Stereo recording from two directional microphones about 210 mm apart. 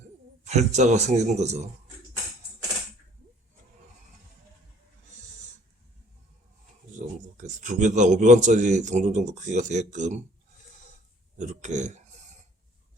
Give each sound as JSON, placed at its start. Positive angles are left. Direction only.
{"t": 0.4, "sound": "a man's voice", "side_deg": -35}
{"t": 7.3, "sound": "a man's voice", "side_deg": -35}
{"t": 11.3, "sound": "a man's voice", "side_deg": -35}